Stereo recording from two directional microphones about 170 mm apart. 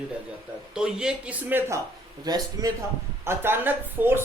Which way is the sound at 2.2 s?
25° right (ahead or behind).